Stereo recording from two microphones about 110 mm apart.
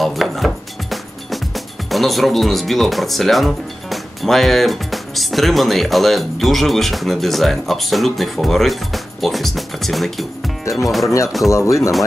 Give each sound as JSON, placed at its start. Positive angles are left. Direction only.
{"t": 0.0, "sound": "speech", "side_deg": 0}
{"t": 10.6, "sound": "speech", "side_deg": 30}